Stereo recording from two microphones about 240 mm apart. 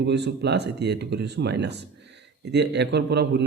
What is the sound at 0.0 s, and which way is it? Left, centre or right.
A man's voice, right.